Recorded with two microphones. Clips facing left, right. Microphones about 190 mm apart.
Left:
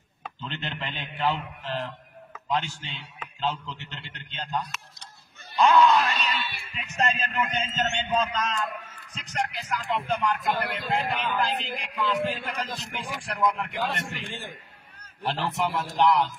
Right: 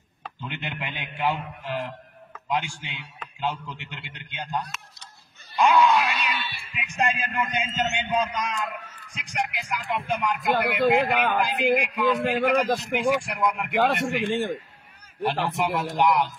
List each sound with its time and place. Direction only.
0.4 s a man's voice: 15° right (ahead or behind)
5.6 s groan: 10° right (ahead or behind)
6.8 s a man's voice: 10° right (ahead or behind)
10.5 s a man's voice: 70° right (ahead or behind)
11.4 s a man's voice: 15° right (ahead or behind)
12.3 s a man's voice: 60° right (ahead or behind)
13.2 s a man's voice: 10° right (ahead or behind)
14.0 s a man's voice: 60° right (ahead or behind)
15.2 s a man's voice: 15° right (ahead or behind)